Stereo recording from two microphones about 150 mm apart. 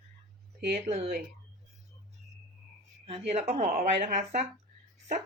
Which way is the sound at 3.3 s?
45° right (ahead or behind).